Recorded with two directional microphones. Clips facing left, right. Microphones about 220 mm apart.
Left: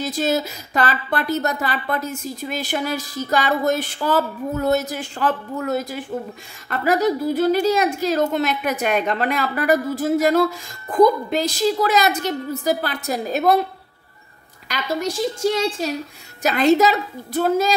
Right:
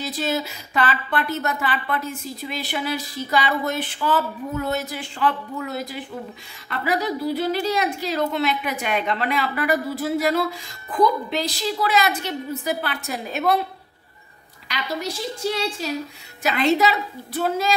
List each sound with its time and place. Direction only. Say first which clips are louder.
0.0 s speech: left 4 dB; 45° left (ahead or behind)
14.7 s speech: left 4 dB; 45° left (ahead or behind)